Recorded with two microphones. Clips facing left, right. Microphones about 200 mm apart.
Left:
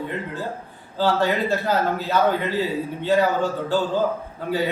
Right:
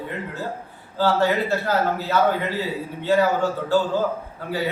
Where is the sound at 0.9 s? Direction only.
15° left (ahead or behind).